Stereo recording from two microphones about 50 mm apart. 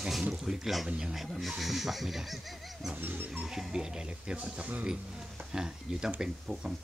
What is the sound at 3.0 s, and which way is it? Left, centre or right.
Dog, right.